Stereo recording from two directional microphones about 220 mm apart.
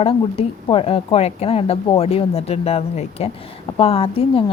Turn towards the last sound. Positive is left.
turn(degrees=25)  # may be behind; listen again after turning